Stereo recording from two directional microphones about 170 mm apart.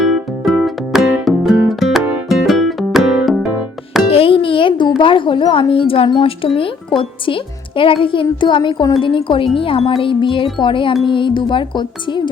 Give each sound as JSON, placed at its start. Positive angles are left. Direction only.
{"t": 0.0, "sound": "music", "side_deg": 0}
{"t": 4.1, "sound": "speech", "side_deg": 35}